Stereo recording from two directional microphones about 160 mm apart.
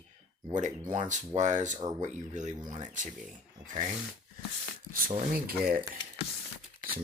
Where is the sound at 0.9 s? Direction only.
50° right (ahead or behind).